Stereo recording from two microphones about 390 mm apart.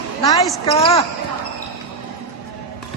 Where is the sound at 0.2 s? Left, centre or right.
Centre.